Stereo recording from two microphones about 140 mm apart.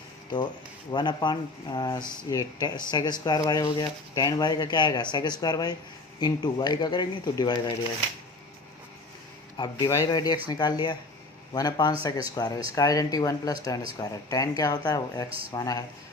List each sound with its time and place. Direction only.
0.9 s speech: 30° left (ahead or behind)
9.6 s speech: 25° left (ahead or behind)